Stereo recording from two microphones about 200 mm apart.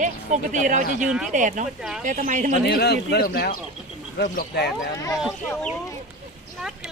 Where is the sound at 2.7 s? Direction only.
55° left (ahead or behind).